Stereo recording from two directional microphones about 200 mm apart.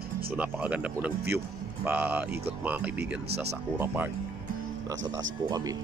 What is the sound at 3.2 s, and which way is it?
Speech, 55° right (ahead or behind).